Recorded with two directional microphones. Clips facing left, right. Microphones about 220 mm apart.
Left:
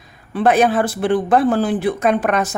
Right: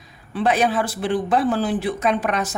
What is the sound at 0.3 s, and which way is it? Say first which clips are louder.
Speech: left 5 dB; 55° left (ahead or behind).